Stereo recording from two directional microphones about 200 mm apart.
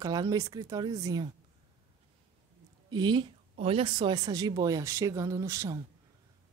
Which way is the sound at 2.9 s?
20° right (ahead or behind).